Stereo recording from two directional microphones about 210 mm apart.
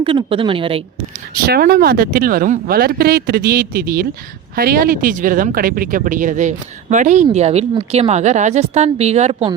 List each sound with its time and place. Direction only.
0.0 s speech: 25° right (ahead or behind)
1.5 s speech: 45° right (ahead or behind); by 9.6 s 30° right (ahead or behind)